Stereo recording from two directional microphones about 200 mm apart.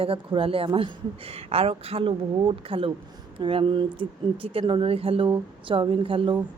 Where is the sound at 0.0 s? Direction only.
25° right (ahead or behind).